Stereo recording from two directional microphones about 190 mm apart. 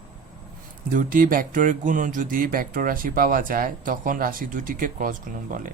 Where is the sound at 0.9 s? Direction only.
45° right (ahead or behind).